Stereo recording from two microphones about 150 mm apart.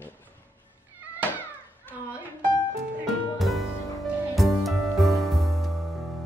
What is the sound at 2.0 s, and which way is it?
Music, 10° right (ahead or behind).